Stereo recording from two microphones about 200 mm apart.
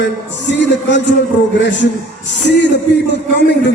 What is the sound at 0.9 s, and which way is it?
Speech, 65° left (ahead or behind).